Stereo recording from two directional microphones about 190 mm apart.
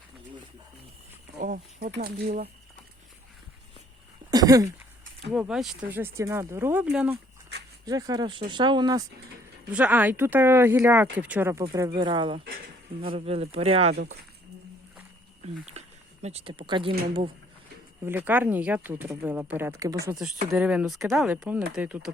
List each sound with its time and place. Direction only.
1.4 s speech: 50° right (ahead or behind)
4.3 s throat clearing: 20° right (ahead or behind)
5.3 s speech: 5° right (ahead or behind)
7.9 s speech: 20° right (ahead or behind)
9.7 s speech: 10° right (ahead or behind); by 13.9 s 30° right (ahead or behind)
16.2 s speech: 30° right (ahead or behind)
18.0 s speech: 10° right (ahead or behind)